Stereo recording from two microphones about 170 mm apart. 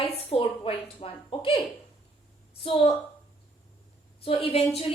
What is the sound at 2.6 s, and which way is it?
Speech, 35° left (ahead or behind).